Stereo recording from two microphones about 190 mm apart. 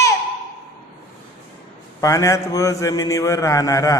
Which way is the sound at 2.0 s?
15° left (ahead or behind).